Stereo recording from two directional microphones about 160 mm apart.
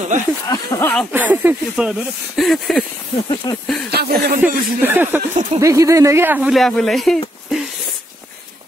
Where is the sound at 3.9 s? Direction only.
85° right.